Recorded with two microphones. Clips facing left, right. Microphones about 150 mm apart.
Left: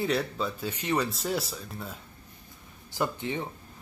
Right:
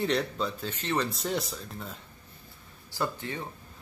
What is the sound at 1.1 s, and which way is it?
Speech, centre (ahead or behind).